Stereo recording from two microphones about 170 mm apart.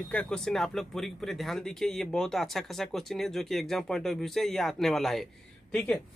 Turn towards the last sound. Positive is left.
turn(degrees=5)  # may be behind; listen again after turning